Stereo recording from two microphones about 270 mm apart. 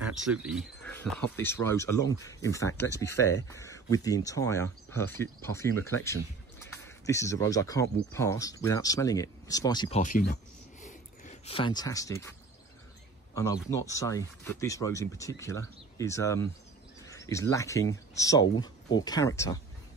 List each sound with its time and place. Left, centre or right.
0.3 s speech: centre
13.3 s a man's voice: centre